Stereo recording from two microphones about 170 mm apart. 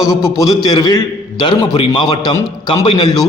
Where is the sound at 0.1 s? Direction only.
20° left (ahead or behind).